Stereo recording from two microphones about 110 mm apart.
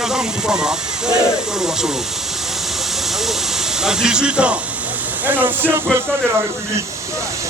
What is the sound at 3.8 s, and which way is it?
Speech, 5° right (ahead or behind).